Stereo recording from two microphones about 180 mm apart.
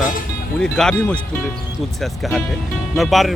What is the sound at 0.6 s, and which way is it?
Speech, 5° left (ahead or behind).